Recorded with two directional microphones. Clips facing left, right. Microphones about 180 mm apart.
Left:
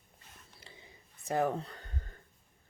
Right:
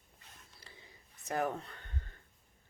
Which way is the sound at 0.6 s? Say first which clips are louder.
Left 3 dB; 25° left (ahead or behind).